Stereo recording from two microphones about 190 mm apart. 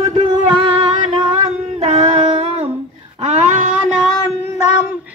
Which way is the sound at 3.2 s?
35° right (ahead or behind).